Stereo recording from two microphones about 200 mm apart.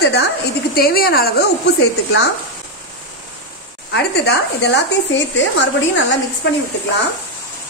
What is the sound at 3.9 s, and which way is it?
A woman's voice, 60° left (ahead or behind).